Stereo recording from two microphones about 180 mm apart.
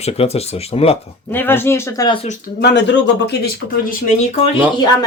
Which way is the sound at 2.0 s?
35° left (ahead or behind).